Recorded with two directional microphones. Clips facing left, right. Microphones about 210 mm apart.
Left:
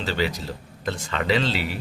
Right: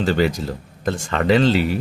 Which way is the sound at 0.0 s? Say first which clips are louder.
Right 7 dB; 50° right (ahead or behind).